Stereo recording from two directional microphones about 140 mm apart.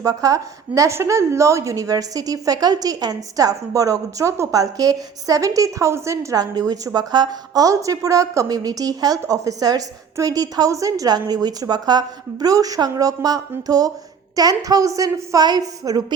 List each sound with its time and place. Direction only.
0.0 s a woman's voice: 25° right (ahead or behind)